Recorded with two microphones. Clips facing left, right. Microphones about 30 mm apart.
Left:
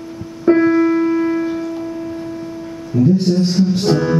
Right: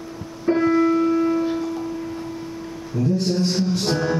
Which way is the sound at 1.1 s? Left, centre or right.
Left.